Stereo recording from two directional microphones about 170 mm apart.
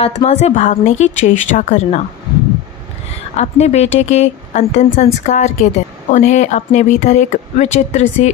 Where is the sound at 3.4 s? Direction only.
40° left (ahead or behind).